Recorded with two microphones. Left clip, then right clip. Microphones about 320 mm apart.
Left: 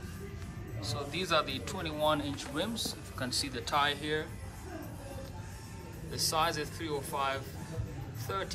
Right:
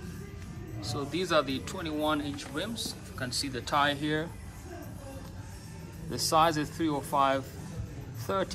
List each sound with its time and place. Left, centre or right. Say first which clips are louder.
0.7 s speech: right 3 dB; centre
6.1 s speech: right 6 dB; centre